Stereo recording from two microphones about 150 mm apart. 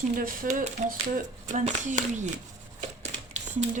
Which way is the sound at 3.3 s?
50° right (ahead or behind).